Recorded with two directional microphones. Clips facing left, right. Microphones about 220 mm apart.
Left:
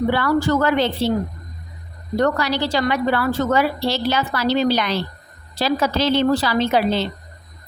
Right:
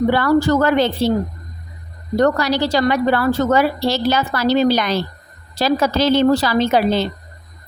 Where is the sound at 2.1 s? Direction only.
40° right (ahead or behind).